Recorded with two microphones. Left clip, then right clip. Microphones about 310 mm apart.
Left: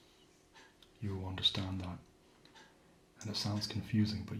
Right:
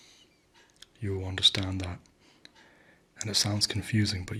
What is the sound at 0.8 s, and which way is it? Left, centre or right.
Speech, right.